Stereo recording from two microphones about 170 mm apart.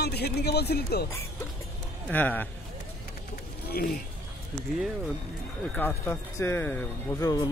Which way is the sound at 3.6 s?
60° left (ahead or behind).